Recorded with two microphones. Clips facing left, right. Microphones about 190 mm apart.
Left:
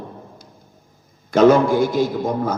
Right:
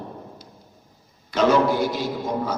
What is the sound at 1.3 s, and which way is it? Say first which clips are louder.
A man's voice: left 6 dB; 50° left (ahead or behind).